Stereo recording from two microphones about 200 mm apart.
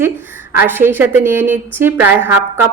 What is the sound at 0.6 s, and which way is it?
A woman's voice, 10° right (ahead or behind).